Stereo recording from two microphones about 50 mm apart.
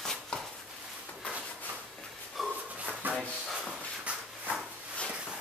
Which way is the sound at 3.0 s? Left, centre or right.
Right.